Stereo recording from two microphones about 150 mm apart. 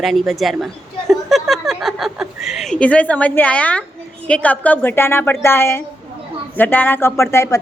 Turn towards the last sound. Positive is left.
turn(degrees=20)  # may be behind; listen again after turning